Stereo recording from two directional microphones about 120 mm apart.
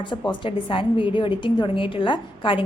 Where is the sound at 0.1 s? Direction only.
45° left (ahead or behind).